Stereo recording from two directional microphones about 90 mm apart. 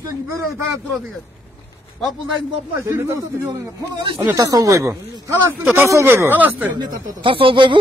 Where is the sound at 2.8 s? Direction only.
25° right (ahead or behind).